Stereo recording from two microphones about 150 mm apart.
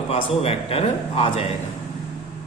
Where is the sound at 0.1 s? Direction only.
40° left (ahead or behind).